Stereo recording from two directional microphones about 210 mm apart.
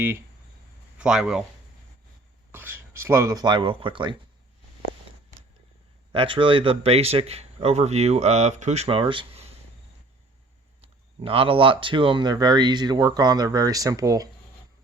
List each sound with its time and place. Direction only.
0.9 s speech: 5° right (ahead or behind)
2.5 s speech: 10° right (ahead or behind)
6.1 s speech: 25° right (ahead or behind)
10.8 s speech: 25° right (ahead or behind)